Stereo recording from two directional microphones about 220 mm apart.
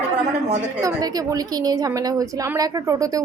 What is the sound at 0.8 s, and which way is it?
A woman's voice, 15° right (ahead or behind).